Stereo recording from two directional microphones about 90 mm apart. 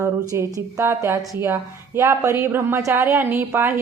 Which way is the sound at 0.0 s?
30° right (ahead or behind).